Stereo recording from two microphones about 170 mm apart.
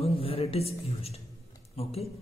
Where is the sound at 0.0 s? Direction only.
35° left (ahead or behind).